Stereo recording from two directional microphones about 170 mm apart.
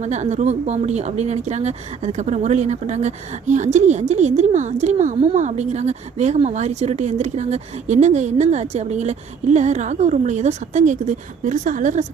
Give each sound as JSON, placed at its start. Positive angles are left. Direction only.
{"t": 0.0, "sound": "speech", "side_deg": -40}